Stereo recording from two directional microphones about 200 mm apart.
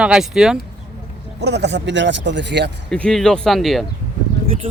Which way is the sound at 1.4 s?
60° right (ahead or behind).